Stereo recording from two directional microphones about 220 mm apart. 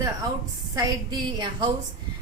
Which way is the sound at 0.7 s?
20° right (ahead or behind).